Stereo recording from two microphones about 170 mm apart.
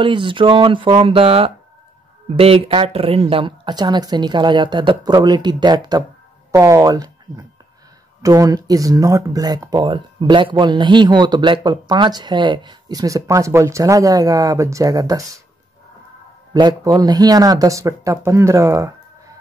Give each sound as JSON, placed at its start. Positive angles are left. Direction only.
{"t": 0.0, "sound": "speech", "side_deg": -30}
{"t": 16.5, "sound": "speech", "side_deg": -25}